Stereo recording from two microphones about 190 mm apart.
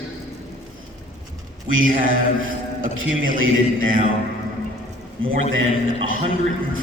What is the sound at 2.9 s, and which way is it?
Speech, 90° right.